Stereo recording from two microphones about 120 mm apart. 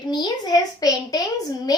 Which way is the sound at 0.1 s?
35° left (ahead or behind).